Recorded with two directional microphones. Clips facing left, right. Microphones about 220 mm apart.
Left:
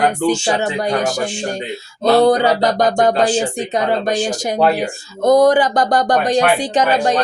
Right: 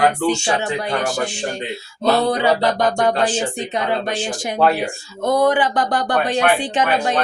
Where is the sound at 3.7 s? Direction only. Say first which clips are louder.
Left 6 dB; 40° left (ahead or behind).